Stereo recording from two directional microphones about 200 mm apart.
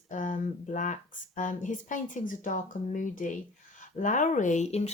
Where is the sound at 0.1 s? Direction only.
40° left (ahead or behind).